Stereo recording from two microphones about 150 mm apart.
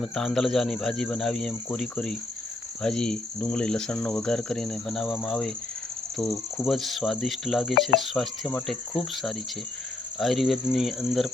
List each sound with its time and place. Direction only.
0.0 s cricket: centre (ahead or behind)
6.2 s cricket: 20° left (ahead or behind)
6.7 s cricket: centre (ahead or behind)
10.2 s cricket: centre (ahead or behind)